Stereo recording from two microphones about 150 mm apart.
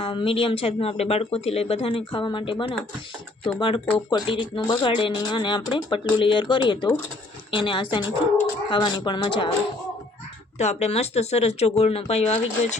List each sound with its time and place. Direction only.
0.0 s speech: 35° left (ahead or behind)
10.6 s speech: 50° left (ahead or behind)